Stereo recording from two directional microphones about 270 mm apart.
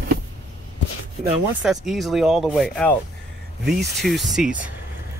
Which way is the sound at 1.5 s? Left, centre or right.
Centre.